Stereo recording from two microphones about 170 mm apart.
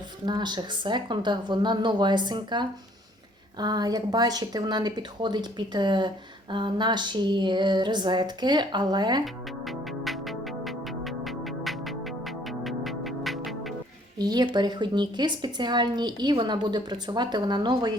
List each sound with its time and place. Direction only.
0.3 s a woman's voice: 25° right (ahead or behind)
9.2 s music: centre (ahead or behind)
14.2 s a woman's voice: 25° right (ahead or behind)